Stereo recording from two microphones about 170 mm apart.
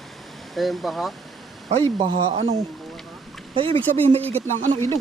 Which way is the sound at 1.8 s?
35° right (ahead or behind).